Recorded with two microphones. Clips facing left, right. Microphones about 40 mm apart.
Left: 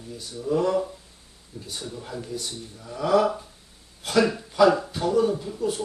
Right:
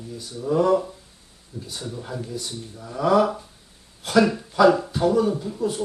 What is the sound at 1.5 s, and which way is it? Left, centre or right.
Speech, centre.